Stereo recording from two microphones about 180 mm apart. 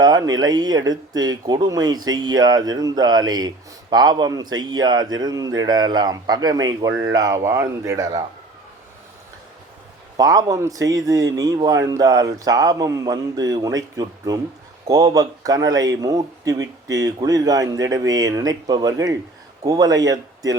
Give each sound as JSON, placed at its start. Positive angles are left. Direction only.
{"t": 0.0, "sound": "speech", "side_deg": -20}
{"t": 10.2, "sound": "speech", "side_deg": -20}